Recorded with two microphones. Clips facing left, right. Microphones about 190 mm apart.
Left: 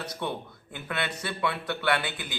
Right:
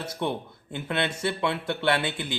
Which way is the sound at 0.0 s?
25° right (ahead or behind).